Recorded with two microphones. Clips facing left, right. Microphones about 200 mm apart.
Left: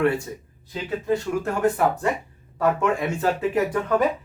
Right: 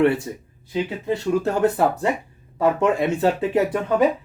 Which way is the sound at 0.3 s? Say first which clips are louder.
Right 4 dB; 20° right (ahead or behind).